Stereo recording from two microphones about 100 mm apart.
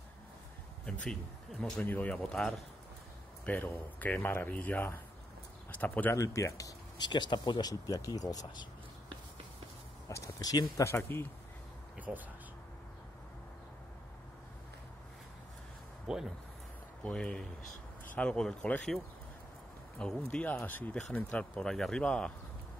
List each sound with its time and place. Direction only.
1.8 s speech: 15° left (ahead or behind)
6.1 s speech: 30° left (ahead or behind)
7.0 s speech: 50° left (ahead or behind)
10.0 s speech: 35° left (ahead or behind)
12.1 s speech: 5° right (ahead or behind)
16.1 s speech: 5° right (ahead or behind)
17.0 s speech: 10° left (ahead or behind)
20.0 s speech: 10° left (ahead or behind)